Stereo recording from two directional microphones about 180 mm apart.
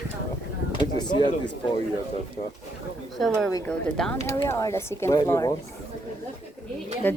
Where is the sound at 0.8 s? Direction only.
25° left (ahead or behind).